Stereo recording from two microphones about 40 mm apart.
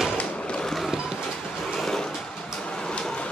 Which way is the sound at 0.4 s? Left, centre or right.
Left.